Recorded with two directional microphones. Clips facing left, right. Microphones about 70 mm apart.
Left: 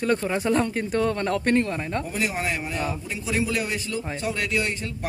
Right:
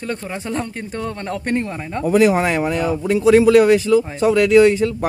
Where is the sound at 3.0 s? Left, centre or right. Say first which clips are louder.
Right 15 dB; right.